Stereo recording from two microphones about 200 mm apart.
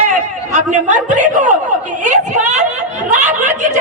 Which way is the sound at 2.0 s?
35° right (ahead or behind).